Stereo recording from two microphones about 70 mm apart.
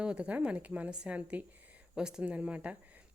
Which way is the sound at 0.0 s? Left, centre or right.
Centre.